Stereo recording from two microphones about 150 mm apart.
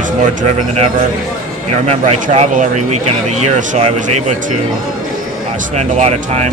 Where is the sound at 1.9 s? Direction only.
45° right (ahead or behind).